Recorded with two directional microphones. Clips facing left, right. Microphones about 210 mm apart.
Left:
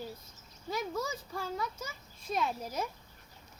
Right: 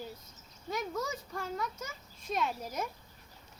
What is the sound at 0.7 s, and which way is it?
Speech, 5° left (ahead or behind).